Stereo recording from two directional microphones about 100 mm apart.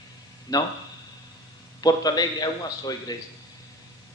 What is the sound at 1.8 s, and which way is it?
A man's voice, 40° left (ahead or behind).